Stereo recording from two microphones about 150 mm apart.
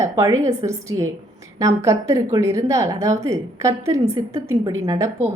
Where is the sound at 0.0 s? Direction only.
20° right (ahead or behind).